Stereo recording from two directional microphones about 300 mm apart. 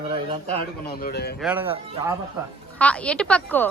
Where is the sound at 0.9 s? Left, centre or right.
Left.